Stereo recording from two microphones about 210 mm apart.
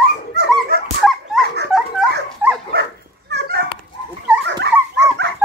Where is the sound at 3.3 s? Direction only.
55° right (ahead or behind).